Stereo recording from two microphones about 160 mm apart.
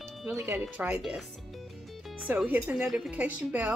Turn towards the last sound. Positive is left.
turn(degrees=-10)  # may be behind; listen again after turning